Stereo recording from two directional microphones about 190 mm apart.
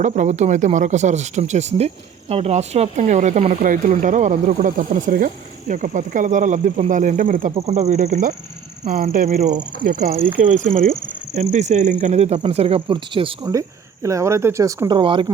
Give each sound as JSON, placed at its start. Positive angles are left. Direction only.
{"t": 0.0, "sound": "speech", "side_deg": -40}